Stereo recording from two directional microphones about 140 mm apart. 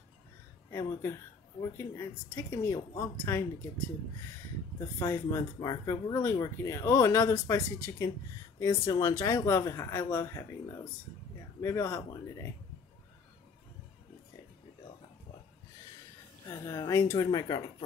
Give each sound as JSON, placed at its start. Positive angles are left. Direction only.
{"t": 1.6, "sound": "speech", "side_deg": 20}
{"t": 4.7, "sound": "speech", "side_deg": 20}
{"t": 16.4, "sound": "speech", "side_deg": 20}